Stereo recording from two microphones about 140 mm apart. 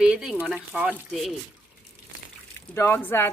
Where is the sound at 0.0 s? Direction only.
5° right (ahead or behind).